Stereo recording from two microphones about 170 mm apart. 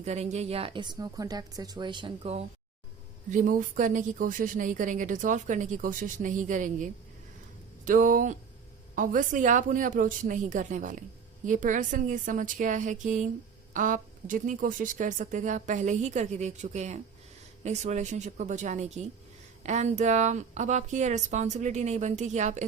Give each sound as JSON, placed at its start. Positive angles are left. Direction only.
{"t": 0.0, "sound": "speech", "side_deg": -40}
{"t": 3.2, "sound": "a woman's voice", "side_deg": -50}